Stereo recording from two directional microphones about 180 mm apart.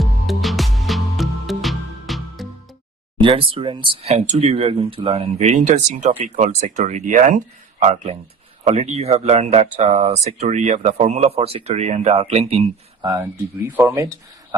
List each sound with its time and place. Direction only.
0.0 s music: centre (ahead or behind)
3.2 s speech: 30° right (ahead or behind); by 7.4 s 45° right (ahead or behind)
7.8 s speech: 35° right (ahead or behind)
13.0 s speech: 20° right (ahead or behind)